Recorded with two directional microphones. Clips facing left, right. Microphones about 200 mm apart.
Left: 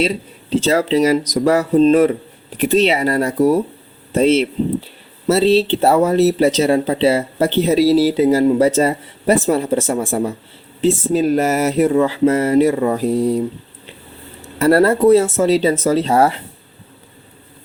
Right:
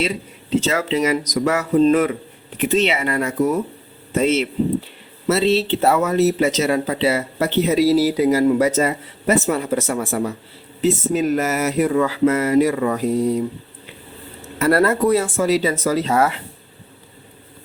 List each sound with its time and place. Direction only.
0.5 s speech: 35° left (ahead or behind)
14.6 s speech: 30° left (ahead or behind)